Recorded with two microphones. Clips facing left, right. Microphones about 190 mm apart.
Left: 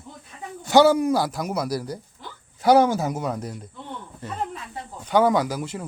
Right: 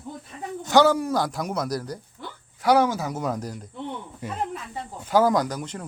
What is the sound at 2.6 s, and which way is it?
Speech, 25° left (ahead or behind).